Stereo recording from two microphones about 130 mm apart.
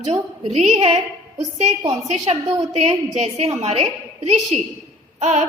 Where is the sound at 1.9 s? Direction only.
60° right (ahead or behind).